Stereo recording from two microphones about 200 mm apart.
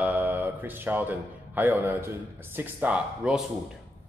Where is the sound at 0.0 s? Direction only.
10° right (ahead or behind).